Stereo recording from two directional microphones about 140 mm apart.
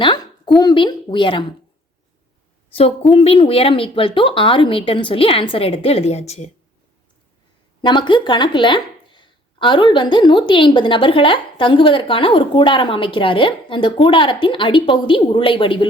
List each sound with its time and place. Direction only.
0.0 s a woman's voice: 35° left (ahead or behind)
2.7 s speech: 45° left (ahead or behind)
7.8 s speech: 35° left (ahead or behind)